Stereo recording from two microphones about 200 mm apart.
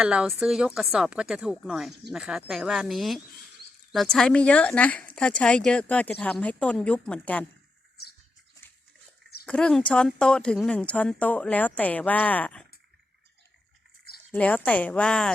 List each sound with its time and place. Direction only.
0.0 s speech: 5° right (ahead or behind)
9.5 s speech: 5° left (ahead or behind)
14.3 s speech: 5° left (ahead or behind)